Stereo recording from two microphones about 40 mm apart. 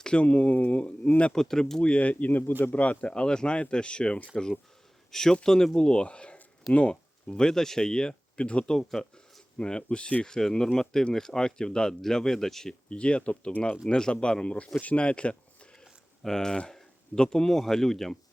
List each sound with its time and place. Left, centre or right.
0.2 s a man's voice: left
1.3 s speech: centre
1.8 s a man's voice: left
8.8 s speech: centre
9.6 s speech: left
10.2 s speech: centre
12.9 s speech: left
15.8 s speech: centre